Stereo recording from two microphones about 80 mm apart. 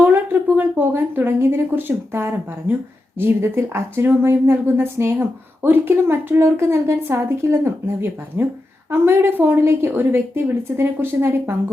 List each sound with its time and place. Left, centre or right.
0.0 s a woman's voice: right